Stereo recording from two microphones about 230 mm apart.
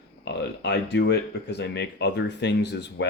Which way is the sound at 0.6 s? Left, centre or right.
Left.